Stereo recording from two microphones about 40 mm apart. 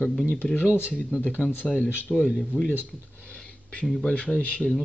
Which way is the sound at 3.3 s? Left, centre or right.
Left.